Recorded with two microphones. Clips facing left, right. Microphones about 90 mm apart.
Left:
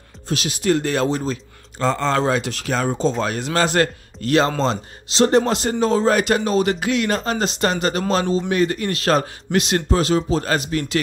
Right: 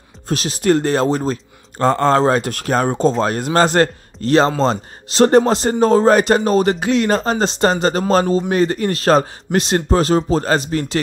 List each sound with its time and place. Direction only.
0.3 s speech: 40° right (ahead or behind)
4.6 s speech: 45° right (ahead or behind)
5.4 s speech: 35° right (ahead or behind)